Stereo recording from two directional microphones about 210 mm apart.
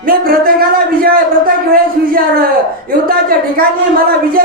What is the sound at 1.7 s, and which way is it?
Speech, 45° right (ahead or behind).